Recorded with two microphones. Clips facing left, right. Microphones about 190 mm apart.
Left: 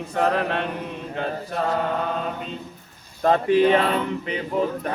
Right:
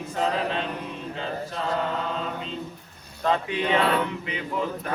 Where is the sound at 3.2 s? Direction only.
45° left (ahead or behind).